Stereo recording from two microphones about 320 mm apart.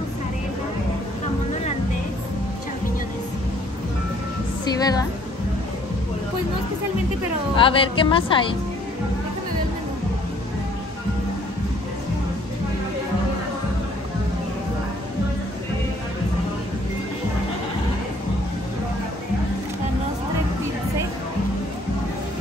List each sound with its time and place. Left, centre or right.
1.5 s music: left
4.7 s speech: centre
7.5 s speech: centre